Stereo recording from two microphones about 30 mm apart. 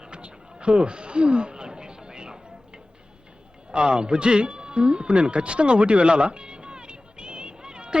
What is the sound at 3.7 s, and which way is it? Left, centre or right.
Speech, right.